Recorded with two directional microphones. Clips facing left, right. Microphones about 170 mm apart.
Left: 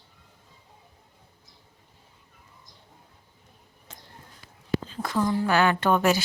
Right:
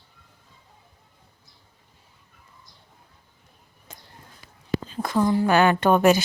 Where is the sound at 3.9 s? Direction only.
10° right (ahead or behind).